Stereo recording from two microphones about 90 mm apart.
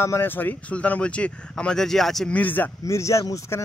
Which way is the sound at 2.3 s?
20° left (ahead or behind).